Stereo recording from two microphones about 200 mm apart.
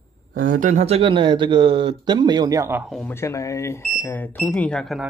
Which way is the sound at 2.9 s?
5° left (ahead or behind).